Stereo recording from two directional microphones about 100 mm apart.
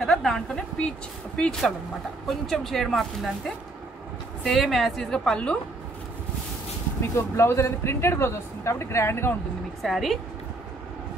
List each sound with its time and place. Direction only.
0.0 s speech: 5° left (ahead or behind)
7.2 s speech: 25° left (ahead or behind)
9.8 s a woman's voice: centre (ahead or behind)